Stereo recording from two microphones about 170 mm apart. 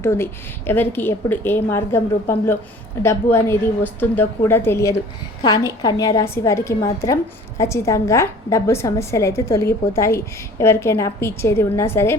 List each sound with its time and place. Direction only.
0.0 s a woman's voice: 15° left (ahead or behind)